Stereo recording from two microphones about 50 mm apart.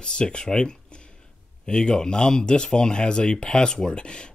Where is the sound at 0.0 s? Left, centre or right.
Centre.